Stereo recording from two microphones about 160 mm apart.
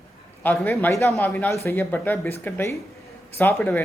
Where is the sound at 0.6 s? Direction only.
10° left (ahead or behind).